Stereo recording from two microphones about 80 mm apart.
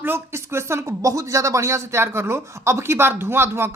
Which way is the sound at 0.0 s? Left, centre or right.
Right.